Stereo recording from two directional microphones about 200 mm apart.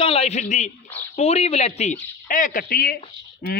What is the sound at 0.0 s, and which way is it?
A man's voice, 30° left (ahead or behind).